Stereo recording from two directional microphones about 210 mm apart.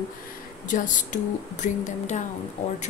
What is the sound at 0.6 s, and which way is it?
A woman's voice, 35° left (ahead or behind).